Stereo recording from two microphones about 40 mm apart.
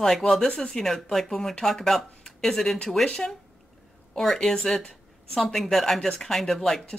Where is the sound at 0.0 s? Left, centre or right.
Centre.